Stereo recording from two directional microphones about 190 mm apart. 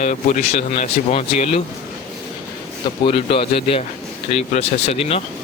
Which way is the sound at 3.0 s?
30° left (ahead or behind).